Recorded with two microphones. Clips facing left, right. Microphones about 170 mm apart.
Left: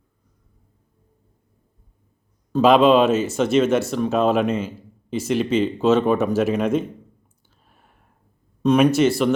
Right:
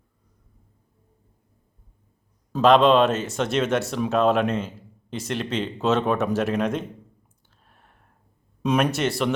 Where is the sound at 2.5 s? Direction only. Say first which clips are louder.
Left 2 dB; 5° left (ahead or behind).